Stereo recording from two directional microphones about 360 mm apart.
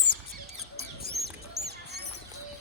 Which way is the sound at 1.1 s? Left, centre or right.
Right.